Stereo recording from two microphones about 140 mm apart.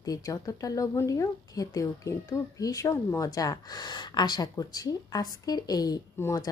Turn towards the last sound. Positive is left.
turn(degrees=25)  # may be behind; listen again after turning